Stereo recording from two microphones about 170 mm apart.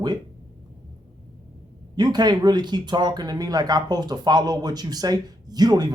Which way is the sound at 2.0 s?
25° right (ahead or behind).